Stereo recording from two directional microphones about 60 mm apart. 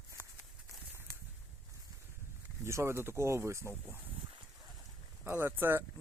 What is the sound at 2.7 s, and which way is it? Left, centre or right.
Speech, right.